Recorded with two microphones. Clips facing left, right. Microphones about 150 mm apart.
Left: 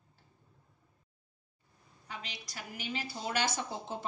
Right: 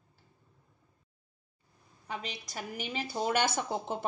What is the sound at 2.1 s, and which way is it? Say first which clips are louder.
A woman's voice: right 6 dB; 50° right (ahead or behind).